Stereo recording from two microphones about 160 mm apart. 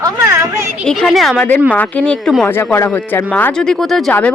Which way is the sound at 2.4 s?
15° left (ahead or behind).